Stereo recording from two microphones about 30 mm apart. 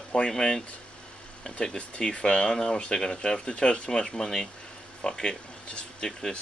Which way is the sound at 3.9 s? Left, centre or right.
Centre.